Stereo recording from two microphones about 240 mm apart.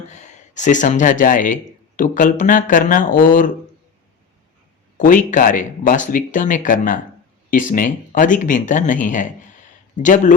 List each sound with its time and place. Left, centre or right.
0.1 s speech: left
4.9 s speech: left